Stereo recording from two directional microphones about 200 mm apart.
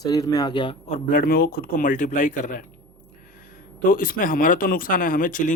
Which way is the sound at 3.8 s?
45° left (ahead or behind).